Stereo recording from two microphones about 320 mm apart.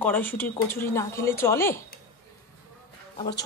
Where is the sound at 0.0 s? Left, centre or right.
Centre.